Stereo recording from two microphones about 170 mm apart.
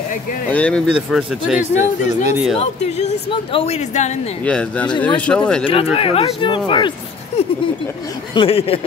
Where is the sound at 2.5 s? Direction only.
40° left (ahead or behind).